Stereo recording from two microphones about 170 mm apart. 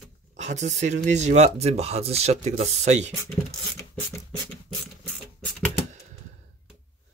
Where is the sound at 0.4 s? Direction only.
45° right (ahead or behind).